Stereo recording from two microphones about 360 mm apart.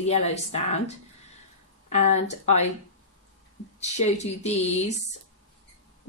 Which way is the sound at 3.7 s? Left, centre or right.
Centre.